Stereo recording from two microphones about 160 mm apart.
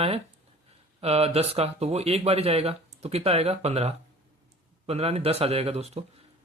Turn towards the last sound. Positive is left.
turn(degrees=-40)  # may be behind; listen again after turning